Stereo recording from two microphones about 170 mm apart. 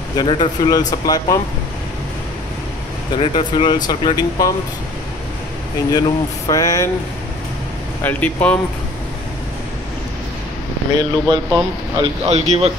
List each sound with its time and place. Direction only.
0.1 s speech: 25° left (ahead or behind)
3.2 s speech: 30° left (ahead or behind)
5.9 s speech: 25° left (ahead or behind)
8.0 s speech: 10° left (ahead or behind)
11.0 s speech: 25° right (ahead or behind)
12.3 s a man's voice: 40° right (ahead or behind)